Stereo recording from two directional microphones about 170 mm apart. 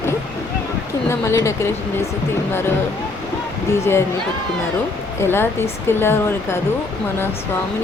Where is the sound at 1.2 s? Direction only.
15° left (ahead or behind).